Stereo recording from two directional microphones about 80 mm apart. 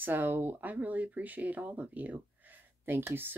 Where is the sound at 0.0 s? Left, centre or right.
Right.